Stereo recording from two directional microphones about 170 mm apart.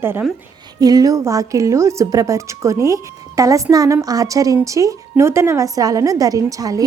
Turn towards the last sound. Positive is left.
turn(degrees=-20)  # may be behind; listen again after turning